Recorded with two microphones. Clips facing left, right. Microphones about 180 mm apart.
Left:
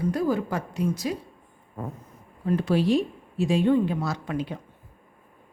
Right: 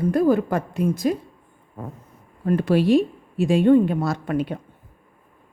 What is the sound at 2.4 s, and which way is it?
A woman's voice, 60° right (ahead or behind).